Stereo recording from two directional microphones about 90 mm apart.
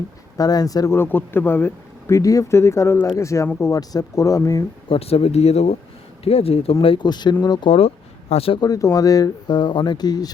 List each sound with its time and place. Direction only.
0.3 s speech: 45° left (ahead or behind)
0.9 s speech: 25° left (ahead or behind); by 4.6 s 40° left (ahead or behind)
4.9 s speech: 90° left
6.8 s speech: 75° left (ahead or behind)
7.1 s speech: 55° left (ahead or behind)
7.7 s speech: 90° left
8.6 s speech: 40° left (ahead or behind)
9.5 s speech: 60° left (ahead or behind)